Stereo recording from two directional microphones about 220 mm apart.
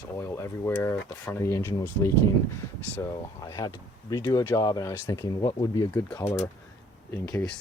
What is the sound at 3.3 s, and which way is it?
Speech, 15° left (ahead or behind).